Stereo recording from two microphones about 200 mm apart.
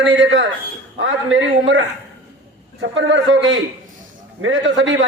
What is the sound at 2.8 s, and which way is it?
A man's voice, 70° right (ahead or behind).